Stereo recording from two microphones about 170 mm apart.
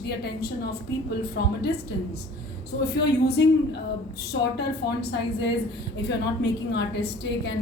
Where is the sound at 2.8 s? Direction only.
75° left (ahead or behind).